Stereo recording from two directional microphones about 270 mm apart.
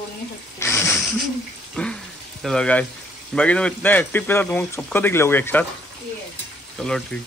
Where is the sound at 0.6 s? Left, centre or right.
Centre.